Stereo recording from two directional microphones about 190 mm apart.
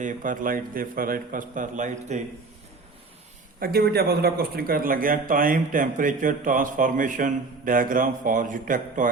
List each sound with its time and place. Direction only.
0.0 s a man's voice: 45° right (ahead or behind)
3.6 s a man's voice: 55° right (ahead or behind)